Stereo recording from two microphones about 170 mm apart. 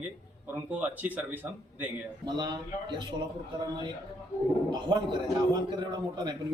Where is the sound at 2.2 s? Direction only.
25° right (ahead or behind).